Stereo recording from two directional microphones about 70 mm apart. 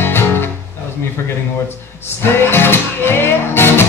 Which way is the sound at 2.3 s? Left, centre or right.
Left.